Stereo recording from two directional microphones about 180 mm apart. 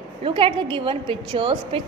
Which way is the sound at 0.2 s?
30° right (ahead or behind).